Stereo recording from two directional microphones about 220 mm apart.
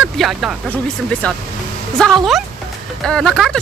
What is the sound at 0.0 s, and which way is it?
Speech, centre (ahead or behind).